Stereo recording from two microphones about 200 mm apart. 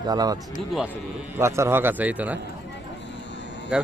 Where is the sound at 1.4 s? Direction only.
15° right (ahead or behind).